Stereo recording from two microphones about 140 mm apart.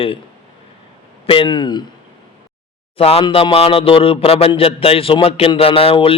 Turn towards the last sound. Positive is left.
turn(degrees=40)  # may be behind; listen again after turning